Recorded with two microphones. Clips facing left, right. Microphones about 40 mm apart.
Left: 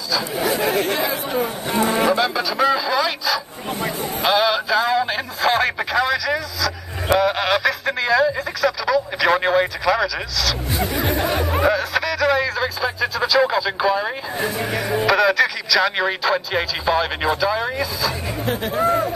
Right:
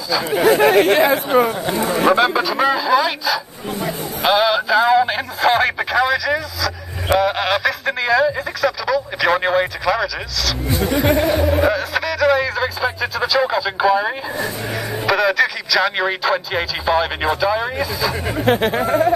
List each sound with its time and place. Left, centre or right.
0.3 s speech: right
1.7 s speech: left
2.0 s speech: right
2.5 s speech: centre
18.4 s speech: right